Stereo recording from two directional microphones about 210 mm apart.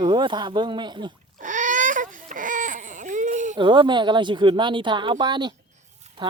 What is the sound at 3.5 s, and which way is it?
Speech, 20° right (ahead or behind).